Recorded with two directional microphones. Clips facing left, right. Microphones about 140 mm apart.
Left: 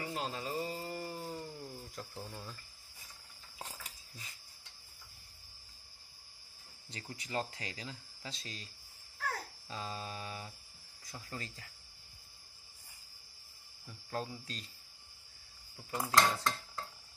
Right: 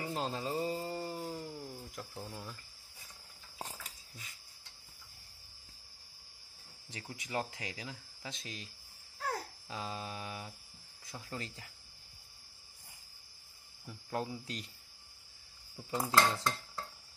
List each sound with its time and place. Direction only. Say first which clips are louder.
0.0 s music: right 2 dB; 30° right (ahead or behind); by 2.5 s 15° right (ahead or behind)
6.9 s speech: right 1 dB; 15° right (ahead or behind)
7.7 s speech: right 1 dB; 5° right (ahead or behind)
8.3 s speech: right 2 dB; 20° right (ahead or behind)
9.2 s babbling: right 2 dB; 15° right (ahead or behind)
11.1 s speech: right 2 dB; 10° right (ahead or behind)
13.8 s speech: right 2 dB; 20° right (ahead or behind)
15.9 s speech: even; 20° right (ahead or behind)